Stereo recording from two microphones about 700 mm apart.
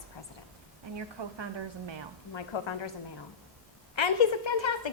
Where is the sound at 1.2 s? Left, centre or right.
Right.